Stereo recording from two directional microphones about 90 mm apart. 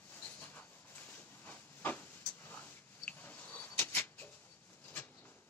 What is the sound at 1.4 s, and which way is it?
Hiss, 20° left (ahead or behind).